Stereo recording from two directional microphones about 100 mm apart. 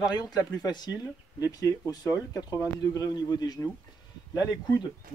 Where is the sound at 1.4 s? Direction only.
35° left (ahead or behind).